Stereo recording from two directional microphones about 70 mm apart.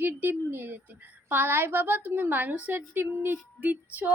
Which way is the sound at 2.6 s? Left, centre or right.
Right.